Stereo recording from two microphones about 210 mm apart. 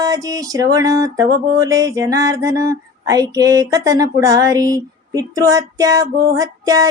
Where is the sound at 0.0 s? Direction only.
15° right (ahead or behind).